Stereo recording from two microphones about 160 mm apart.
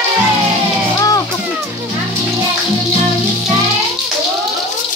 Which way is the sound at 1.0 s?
20° left (ahead or behind).